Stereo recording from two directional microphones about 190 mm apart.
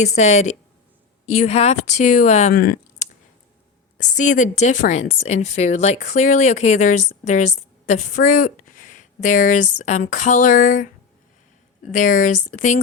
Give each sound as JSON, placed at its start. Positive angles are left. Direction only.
{"t": 0.2, "sound": "a woman's voice", "side_deg": 35}
{"t": 2.5, "sound": "a sound", "side_deg": 50}
{"t": 3.9, "sound": "a woman's voice", "side_deg": 40}
{"t": 11.9, "sound": "speech", "side_deg": 45}